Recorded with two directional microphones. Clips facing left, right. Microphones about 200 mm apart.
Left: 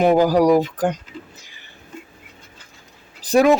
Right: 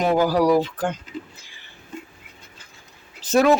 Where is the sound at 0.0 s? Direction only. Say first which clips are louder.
Left 4 dB; 15° left (ahead or behind).